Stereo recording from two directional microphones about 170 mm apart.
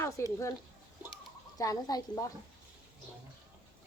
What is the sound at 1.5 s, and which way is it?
Speech, 20° left (ahead or behind).